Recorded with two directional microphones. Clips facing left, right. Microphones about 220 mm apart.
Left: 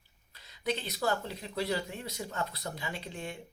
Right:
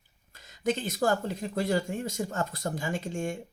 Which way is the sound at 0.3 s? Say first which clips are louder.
Right 5 dB; 45° right (ahead or behind).